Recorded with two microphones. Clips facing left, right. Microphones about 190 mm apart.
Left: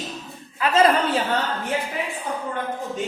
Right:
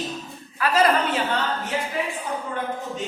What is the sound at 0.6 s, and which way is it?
Speech, 25° left (ahead or behind).